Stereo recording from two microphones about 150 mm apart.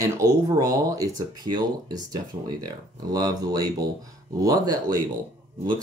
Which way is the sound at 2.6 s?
25° right (ahead or behind).